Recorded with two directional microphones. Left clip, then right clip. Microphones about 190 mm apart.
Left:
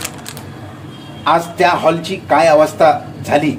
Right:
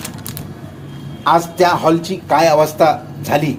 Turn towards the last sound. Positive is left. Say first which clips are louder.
# left 2 dB
turn(degrees=-40)  # may be behind; listen again after turning